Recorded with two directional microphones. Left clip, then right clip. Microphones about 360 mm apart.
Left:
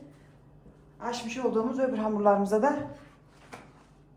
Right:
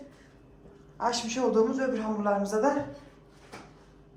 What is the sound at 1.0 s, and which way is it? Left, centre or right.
Speech, centre.